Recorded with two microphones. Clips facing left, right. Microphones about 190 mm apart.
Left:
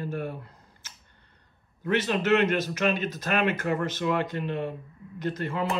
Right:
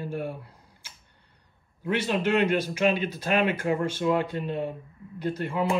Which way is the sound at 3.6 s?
10° right (ahead or behind).